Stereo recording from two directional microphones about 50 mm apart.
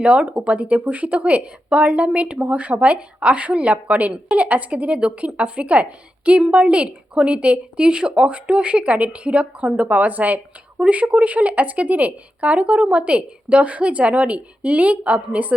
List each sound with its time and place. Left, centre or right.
0.0 s a woman's voice: right